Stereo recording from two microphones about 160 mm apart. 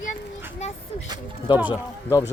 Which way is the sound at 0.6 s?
45° left (ahead or behind).